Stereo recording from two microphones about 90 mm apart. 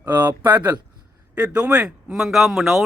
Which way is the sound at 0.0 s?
25° right (ahead or behind).